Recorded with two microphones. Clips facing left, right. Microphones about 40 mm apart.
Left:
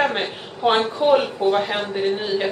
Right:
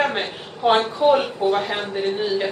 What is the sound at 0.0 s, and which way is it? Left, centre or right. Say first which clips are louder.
A woman's voice: left 1 dB; centre.